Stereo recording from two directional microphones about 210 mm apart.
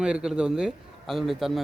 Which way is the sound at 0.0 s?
5° right (ahead or behind).